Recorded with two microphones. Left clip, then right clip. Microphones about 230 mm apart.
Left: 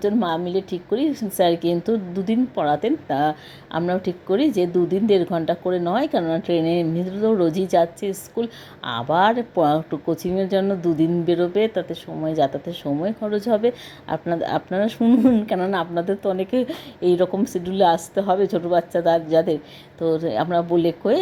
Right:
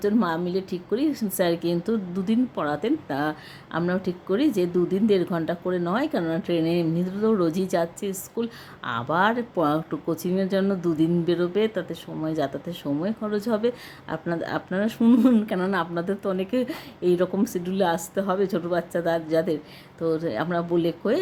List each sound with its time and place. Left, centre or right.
0.0 s speech: centre